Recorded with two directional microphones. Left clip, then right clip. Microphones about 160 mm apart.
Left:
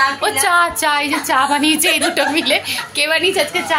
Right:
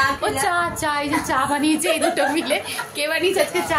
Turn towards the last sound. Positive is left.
turn(degrees=5)  # may be behind; listen again after turning